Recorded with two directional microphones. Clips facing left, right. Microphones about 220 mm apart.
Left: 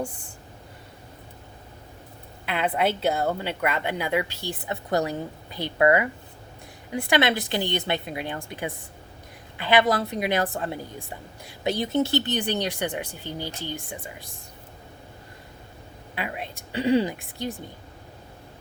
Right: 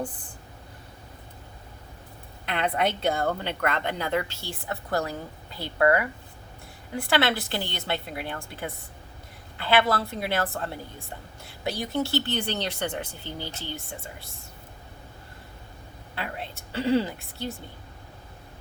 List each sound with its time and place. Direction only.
2.5 s a woman's voice: 5° left (ahead or behind)
16.1 s a woman's voice: 15° left (ahead or behind)